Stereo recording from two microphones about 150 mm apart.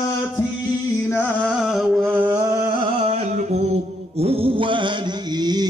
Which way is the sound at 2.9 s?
45° right (ahead or behind).